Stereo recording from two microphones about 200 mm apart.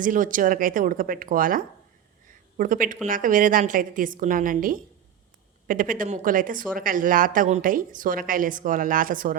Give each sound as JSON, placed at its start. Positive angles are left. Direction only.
{"t": 0.0, "sound": "a woman's voice", "side_deg": -40}